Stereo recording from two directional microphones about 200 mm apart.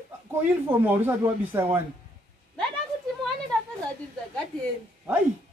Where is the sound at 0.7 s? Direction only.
10° right (ahead or behind).